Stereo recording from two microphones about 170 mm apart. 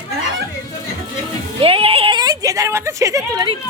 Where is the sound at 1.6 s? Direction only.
35° right (ahead or behind).